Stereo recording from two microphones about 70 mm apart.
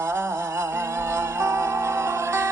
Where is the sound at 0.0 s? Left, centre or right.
Right.